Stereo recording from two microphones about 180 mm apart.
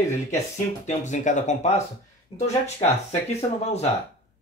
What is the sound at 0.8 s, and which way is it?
Speech, 40° left (ahead or behind).